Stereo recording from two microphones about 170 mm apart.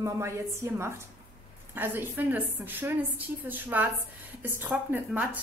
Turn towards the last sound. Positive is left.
turn(degrees=-10)  # may be behind; listen again after turning